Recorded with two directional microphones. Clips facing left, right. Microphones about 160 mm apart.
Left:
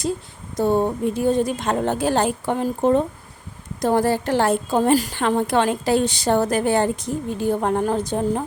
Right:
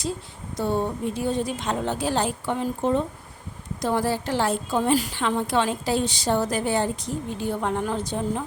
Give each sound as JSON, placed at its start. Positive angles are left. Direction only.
{"t": 0.5, "sound": "a woman's voice", "side_deg": 45}